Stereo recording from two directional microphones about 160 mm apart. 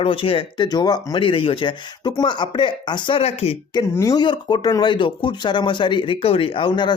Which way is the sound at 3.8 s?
25° left (ahead or behind).